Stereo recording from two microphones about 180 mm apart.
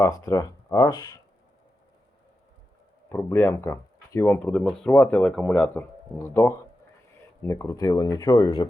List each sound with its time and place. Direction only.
0.0 s speech: 20° left (ahead or behind)
3.1 s speech: 15° left (ahead or behind)